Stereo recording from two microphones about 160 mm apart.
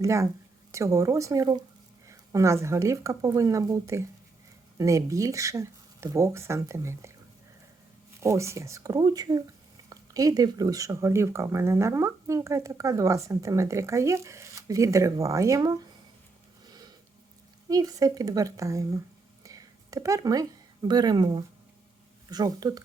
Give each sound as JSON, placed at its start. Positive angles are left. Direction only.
{"t": 0.0, "sound": "speech", "side_deg": -20}
{"t": 8.2, "sound": "speech", "side_deg": -20}
{"t": 17.7, "sound": "speech", "side_deg": -20}